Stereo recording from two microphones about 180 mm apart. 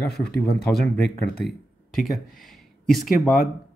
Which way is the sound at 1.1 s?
5° left (ahead or behind).